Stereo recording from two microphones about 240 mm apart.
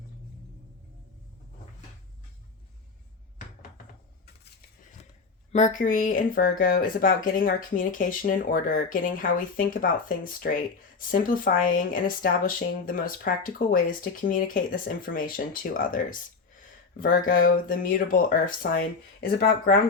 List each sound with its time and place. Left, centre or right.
5.5 s speech: left